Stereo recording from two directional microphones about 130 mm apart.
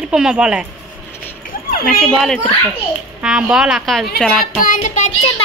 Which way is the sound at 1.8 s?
Centre (ahead or behind).